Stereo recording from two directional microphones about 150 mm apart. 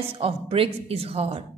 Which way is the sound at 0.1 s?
40° right (ahead or behind).